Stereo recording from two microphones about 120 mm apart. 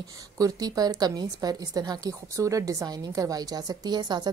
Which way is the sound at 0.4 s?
30° right (ahead or behind).